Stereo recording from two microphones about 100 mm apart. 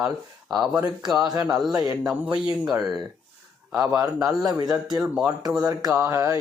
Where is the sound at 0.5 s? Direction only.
10° right (ahead or behind).